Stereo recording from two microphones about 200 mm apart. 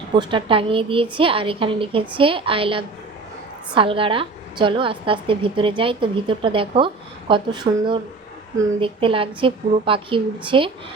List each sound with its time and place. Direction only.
0.2 s a woman's voice: 25° right (ahead or behind)